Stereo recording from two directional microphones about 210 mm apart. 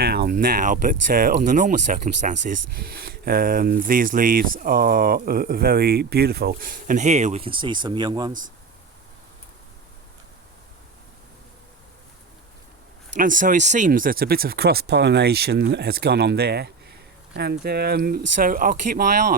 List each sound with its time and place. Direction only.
0.0 s speech: 50° right (ahead or behind); by 8.3 s 20° right (ahead or behind)
8.3 s speech: 40° right (ahead or behind)
13.1 s speech: 40° right (ahead or behind)